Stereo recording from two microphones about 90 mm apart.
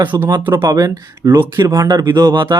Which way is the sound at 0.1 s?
40° right (ahead or behind).